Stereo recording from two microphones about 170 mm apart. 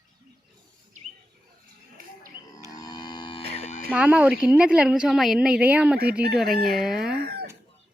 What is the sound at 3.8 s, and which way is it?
A woman's voice, 5° right (ahead or behind).